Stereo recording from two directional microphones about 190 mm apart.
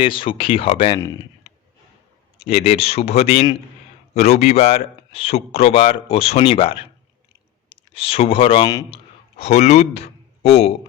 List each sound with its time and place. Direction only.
0.0 s speech: 25° left (ahead or behind)
0.9 s speech: 15° left (ahead or behind)
2.4 s a man's voice: 30° left (ahead or behind)
9.4 s speech: 35° left (ahead or behind)